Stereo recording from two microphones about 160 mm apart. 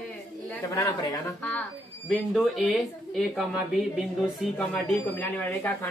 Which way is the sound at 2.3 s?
Centre (ahead or behind).